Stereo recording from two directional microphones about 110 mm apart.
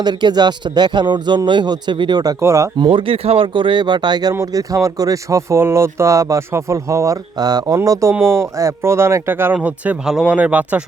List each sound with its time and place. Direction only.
0.0 s speech: 40° right (ahead or behind)
2.4 s speech: 30° right (ahead or behind)
2.7 s speech: 45° right (ahead or behind)
8.1 s speech: 25° right (ahead or behind)